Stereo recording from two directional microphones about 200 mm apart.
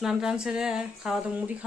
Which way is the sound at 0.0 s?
Centre (ahead or behind).